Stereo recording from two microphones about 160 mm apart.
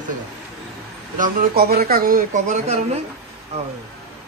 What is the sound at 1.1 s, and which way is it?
Speech, 60° right (ahead or behind).